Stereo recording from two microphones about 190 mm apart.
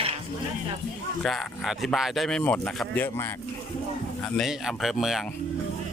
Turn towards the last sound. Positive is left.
turn(degrees=0)  # may be behind; listen again after turning